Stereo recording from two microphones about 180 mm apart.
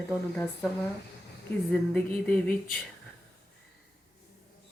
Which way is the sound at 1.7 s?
5° left (ahead or behind).